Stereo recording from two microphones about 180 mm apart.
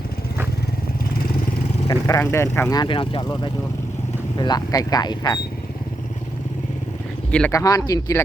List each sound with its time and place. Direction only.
1.9 s vehicle: 15° left (ahead or behind)
2.2 s speech: 15° left (ahead or behind)
7.3 s speech: 5° left (ahead or behind)
7.5 s speech: 20° left (ahead or behind)